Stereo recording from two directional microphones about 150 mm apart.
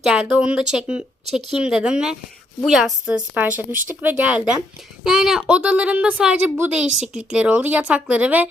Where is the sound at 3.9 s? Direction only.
10° right (ahead or behind).